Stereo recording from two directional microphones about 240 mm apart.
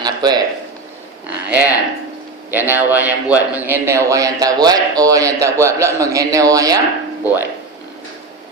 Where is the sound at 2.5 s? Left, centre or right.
Centre.